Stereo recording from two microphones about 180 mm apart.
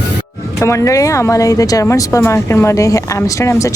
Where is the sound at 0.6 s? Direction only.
15° left (ahead or behind).